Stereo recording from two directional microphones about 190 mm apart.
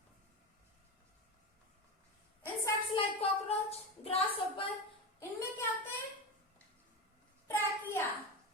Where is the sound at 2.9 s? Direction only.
30° left (ahead or behind).